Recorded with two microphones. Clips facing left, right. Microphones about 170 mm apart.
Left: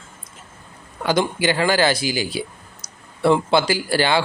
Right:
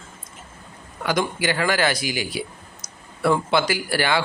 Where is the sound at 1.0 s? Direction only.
25° left (ahead or behind).